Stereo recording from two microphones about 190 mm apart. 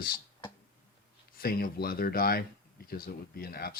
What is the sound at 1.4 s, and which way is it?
Speech, 50° left (ahead or behind).